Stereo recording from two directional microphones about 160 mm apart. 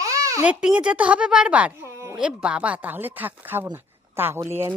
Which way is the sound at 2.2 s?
5° right (ahead or behind).